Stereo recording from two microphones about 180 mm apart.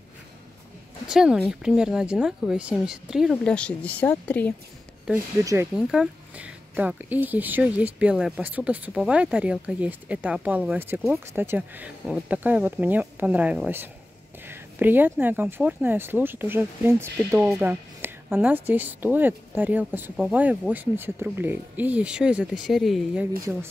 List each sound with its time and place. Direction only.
1.0 s speech: 5° right (ahead or behind)
5.4 s speech: 20° right (ahead or behind)
5.8 s speech: 5° right (ahead or behind)